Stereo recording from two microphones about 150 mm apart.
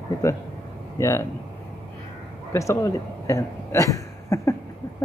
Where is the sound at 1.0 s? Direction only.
20° left (ahead or behind).